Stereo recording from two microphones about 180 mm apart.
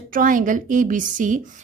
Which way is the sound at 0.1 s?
50° right (ahead or behind).